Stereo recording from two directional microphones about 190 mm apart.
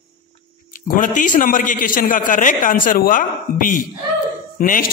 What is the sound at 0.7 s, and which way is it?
A man's voice, 45° left (ahead or behind).